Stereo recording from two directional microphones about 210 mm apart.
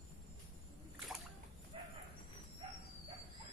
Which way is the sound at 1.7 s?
25° right (ahead or behind).